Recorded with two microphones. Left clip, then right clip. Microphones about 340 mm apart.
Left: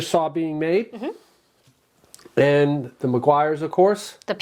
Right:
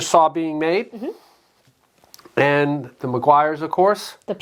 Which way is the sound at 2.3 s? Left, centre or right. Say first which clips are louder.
Even; right.